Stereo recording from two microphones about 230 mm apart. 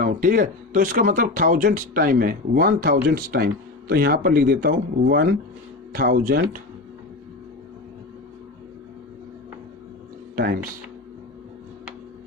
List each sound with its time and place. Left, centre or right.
0.0 s speech: right
10.3 s speech: right